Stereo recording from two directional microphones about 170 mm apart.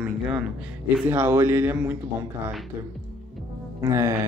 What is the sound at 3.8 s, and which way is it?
Music, 20° right (ahead or behind).